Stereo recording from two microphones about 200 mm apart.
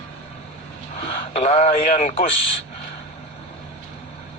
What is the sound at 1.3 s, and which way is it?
Speech, 30° left (ahead or behind).